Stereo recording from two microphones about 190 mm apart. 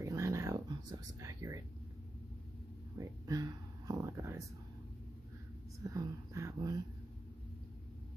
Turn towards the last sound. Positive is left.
turn(degrees=-20)  # may be behind; listen again after turning